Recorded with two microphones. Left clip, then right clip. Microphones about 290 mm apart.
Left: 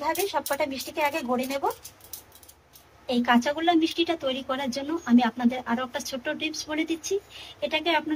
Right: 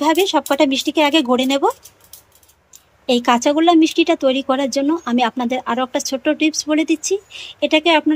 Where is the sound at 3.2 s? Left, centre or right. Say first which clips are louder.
Right 8 dB; centre.